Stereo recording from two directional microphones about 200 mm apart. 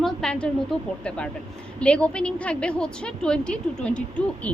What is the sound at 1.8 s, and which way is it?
A woman's voice, 5° left (ahead or behind).